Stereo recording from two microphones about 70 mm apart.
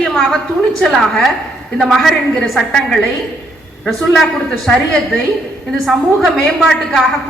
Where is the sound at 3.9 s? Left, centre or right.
Centre.